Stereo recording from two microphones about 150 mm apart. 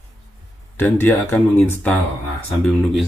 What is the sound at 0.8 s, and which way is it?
Speech, 15° left (ahead or behind).